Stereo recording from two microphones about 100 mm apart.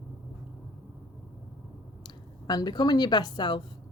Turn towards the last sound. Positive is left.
turn(degrees=50)  # may be behind; listen again after turning